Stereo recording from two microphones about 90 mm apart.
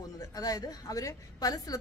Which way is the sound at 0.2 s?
45° left (ahead or behind).